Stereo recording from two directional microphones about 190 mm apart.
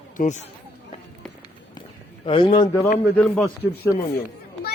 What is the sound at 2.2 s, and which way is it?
Speech, 25° left (ahead or behind).